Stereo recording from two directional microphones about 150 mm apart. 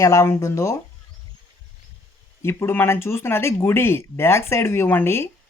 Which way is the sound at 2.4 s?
15° left (ahead or behind).